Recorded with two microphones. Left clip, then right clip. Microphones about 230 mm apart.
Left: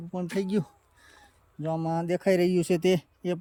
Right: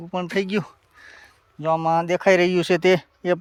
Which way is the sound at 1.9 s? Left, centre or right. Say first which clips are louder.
Right 8 dB; centre.